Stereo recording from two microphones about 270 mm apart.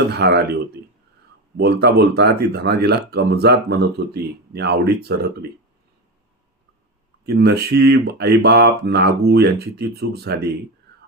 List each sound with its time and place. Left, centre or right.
0.1 s speech: right
1.5 s speech: right
7.3 s speech: right